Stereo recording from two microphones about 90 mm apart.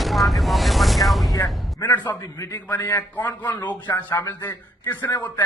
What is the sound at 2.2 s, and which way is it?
A man's voice, 35° left (ahead or behind).